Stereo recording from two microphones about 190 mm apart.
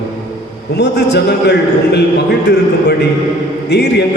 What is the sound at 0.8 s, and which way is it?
A man's voice, 60° left (ahead or behind).